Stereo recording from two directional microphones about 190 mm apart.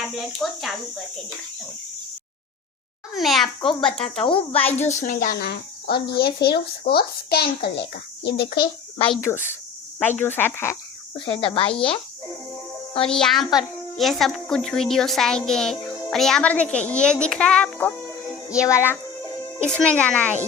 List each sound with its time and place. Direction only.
0.2 s a child's voice: centre (ahead or behind)
3.2 s a child's voice: centre (ahead or behind)
3.9 s speech: 30° left (ahead or behind); by 8.6 s 55° left (ahead or behind)
9.3 s speech: 15° left (ahead or behind)
11.3 s speech: 30° left (ahead or behind)
13.1 s a child's voice: 5° left (ahead or behind)